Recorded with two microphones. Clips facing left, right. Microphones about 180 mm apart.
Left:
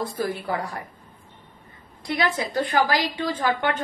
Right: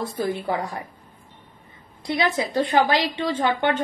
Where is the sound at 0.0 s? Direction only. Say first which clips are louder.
Right 2 dB; 25° right (ahead or behind).